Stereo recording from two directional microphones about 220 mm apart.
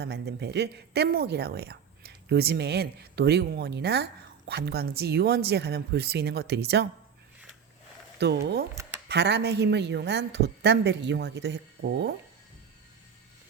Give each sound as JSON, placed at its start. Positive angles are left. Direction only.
{"t": 0.0, "sound": "speech", "side_deg": -50}
{"t": 8.2, "sound": "speech", "side_deg": -50}
{"t": 8.7, "sound": "a sound", "side_deg": -15}
{"t": 9.0, "sound": "speech", "side_deg": -50}